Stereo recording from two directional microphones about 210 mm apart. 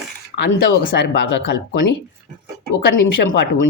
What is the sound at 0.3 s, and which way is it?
Speech, 55° left (ahead or behind).